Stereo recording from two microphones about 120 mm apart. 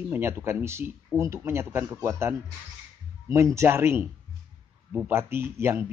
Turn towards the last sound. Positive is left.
turn(degrees=-20)  # may be behind; listen again after turning